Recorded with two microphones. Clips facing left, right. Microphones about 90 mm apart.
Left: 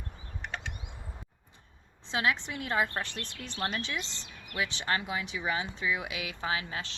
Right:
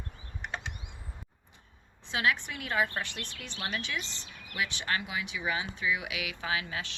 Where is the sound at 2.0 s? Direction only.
25° left (ahead or behind).